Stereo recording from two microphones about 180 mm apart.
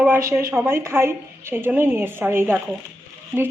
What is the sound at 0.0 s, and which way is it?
A woman's voice, 15° right (ahead or behind).